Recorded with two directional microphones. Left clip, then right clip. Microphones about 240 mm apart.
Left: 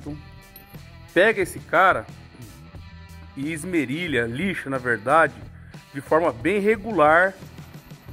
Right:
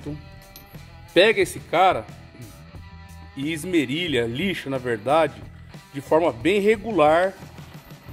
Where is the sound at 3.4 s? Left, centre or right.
Centre.